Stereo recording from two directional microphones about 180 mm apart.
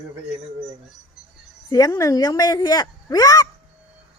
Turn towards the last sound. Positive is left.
turn(degrees=20)  # may be behind; listen again after turning